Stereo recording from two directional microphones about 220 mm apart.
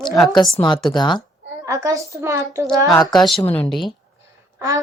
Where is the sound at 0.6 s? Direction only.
20° left (ahead or behind).